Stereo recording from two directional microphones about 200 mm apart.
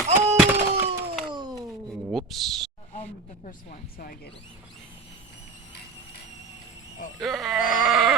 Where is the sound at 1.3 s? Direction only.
20° right (ahead or behind).